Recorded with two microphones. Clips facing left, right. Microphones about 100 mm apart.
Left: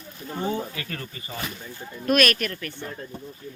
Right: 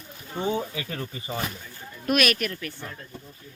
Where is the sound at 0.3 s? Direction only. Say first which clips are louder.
Right 1 dB; 20° right (ahead or behind).